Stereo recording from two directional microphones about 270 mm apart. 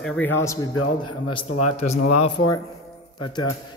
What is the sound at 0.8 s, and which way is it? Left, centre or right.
Speech, left.